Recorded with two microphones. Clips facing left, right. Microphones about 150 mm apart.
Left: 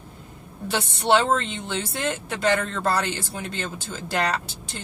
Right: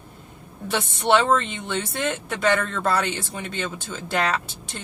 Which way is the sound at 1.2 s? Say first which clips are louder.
Right 2 dB; 60° right (ahead or behind).